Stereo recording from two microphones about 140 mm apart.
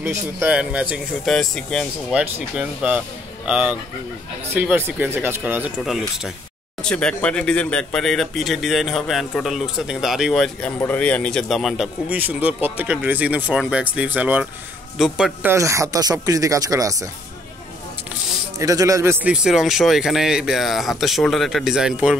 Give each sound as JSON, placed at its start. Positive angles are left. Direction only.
{"t": 0.0, "sound": "speech", "side_deg": -15}
{"t": 2.1, "sound": "a man's voice", "side_deg": -10}
{"t": 15.4, "sound": "speech", "side_deg": -20}
{"t": 18.6, "sound": "a man's voice", "side_deg": -25}